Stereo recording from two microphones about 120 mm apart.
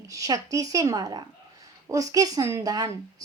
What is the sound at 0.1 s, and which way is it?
A woman's voice, 30° right (ahead or behind).